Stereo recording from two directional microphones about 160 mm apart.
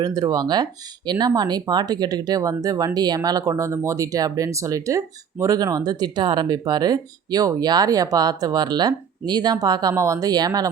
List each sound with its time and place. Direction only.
0.0 s speech: 25° right (ahead or behind)